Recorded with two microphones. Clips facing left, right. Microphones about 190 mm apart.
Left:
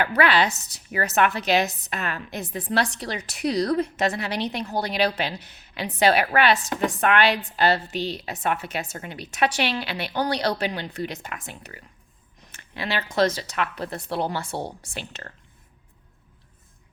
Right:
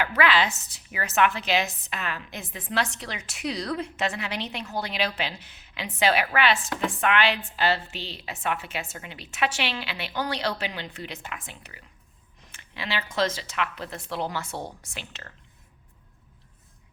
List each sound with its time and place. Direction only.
0.0 s a woman's voice: 40° left (ahead or behind)
12.5 s a sound: 45° left (ahead or behind)
13.1 s a woman's voice: 45° left (ahead or behind)